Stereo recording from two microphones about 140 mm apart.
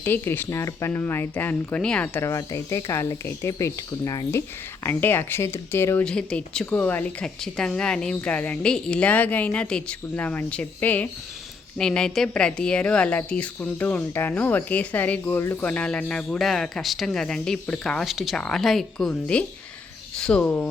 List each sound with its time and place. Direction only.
0.0 s a woman's voice: 15° left (ahead or behind)
6.1 s a woman's voice: 5° left (ahead or behind)